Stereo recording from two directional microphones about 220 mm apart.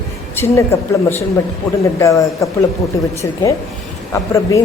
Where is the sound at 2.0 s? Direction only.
15° left (ahead or behind).